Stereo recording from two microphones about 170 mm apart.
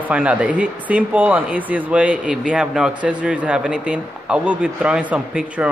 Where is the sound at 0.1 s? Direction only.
5° right (ahead or behind).